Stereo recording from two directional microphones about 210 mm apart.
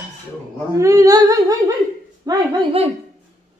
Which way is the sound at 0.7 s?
15° right (ahead or behind).